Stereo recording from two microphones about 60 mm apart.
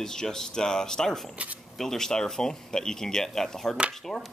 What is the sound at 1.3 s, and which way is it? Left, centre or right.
Speech, right.